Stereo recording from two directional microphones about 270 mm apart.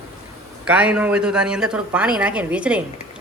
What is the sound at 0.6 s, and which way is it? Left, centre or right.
A woman's voice, centre.